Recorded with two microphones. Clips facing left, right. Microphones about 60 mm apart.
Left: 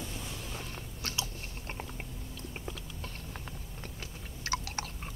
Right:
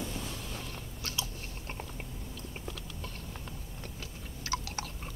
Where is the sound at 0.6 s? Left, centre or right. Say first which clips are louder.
Even; left.